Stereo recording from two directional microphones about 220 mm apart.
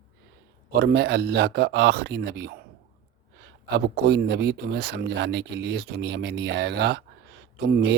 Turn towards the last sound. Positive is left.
turn(degrees=-45)  # may be behind; listen again after turning